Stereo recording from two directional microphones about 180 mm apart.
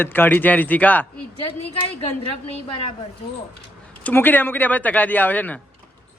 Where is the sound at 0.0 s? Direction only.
10° left (ahead or behind).